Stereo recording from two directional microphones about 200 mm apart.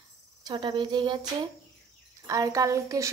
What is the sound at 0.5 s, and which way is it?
Speech, 25° right (ahead or behind).